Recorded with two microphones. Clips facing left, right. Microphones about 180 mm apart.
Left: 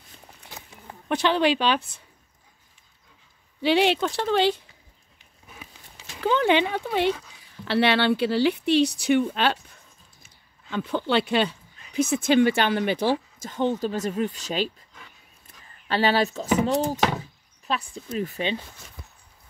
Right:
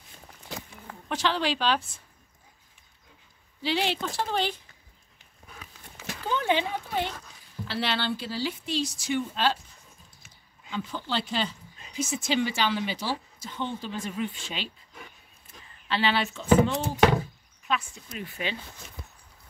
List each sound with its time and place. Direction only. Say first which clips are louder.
1.0 s speech: left 6 dB; 60° left (ahead or behind)
3.6 s speech: left 8 dB; 65° left (ahead or behind)
6.2 s speech: left 6 dB; 80° left
7.6 s speech: left 9 dB; 65° left (ahead or behind)
10.7 s speech: left 8 dB; 60° left (ahead or behind); by 14.7 s 40° left (ahead or behind)
15.9 s speech: left 5 dB; 40° left (ahead or behind)